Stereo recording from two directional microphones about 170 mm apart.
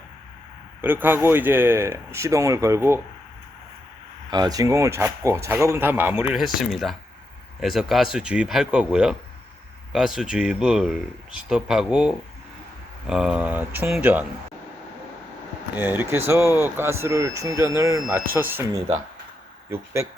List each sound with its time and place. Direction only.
0.8 s speech: 10° right (ahead or behind)
4.3 s speech: 25° right (ahead or behind)
15.8 s speech: 10° right (ahead or behind)